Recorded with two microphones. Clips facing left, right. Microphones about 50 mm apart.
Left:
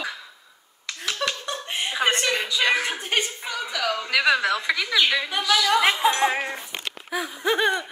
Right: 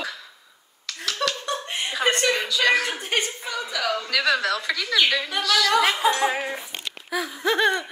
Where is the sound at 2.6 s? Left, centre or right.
Centre.